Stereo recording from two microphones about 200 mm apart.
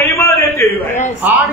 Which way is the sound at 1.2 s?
10° right (ahead or behind).